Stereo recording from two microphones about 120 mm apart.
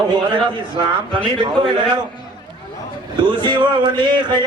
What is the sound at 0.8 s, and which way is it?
Speech, 45° right (ahead or behind).